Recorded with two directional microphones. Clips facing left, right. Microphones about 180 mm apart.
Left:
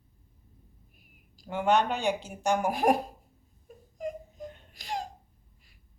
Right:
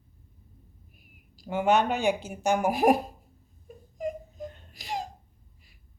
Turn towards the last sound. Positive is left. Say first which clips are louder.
# right 1 dB
turn(degrees=-5)  # may be behind; listen again after turning